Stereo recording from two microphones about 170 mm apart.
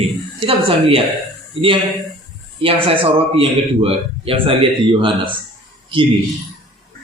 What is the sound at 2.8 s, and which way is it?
Speech, 35° right (ahead or behind).